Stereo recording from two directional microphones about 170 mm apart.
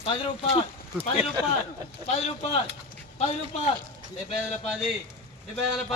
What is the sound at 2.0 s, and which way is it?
A man's voice, 40° left (ahead or behind).